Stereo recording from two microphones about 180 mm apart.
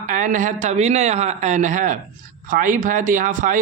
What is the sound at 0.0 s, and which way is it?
Speech, 45° right (ahead or behind).